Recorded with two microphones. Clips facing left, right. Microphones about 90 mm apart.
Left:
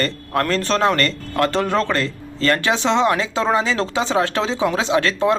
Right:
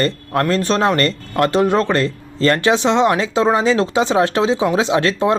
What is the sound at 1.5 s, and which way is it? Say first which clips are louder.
Speech: right 4 dB; 15° right (ahead or behind).